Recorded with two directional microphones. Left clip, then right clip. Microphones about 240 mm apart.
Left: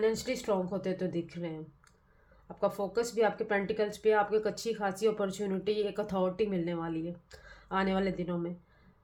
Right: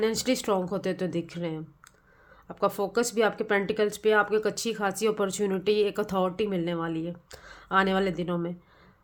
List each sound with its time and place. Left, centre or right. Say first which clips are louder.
0.0 s speech: right 4 dB; right